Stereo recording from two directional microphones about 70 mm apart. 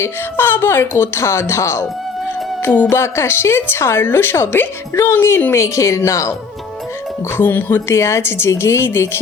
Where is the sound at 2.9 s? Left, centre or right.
Left.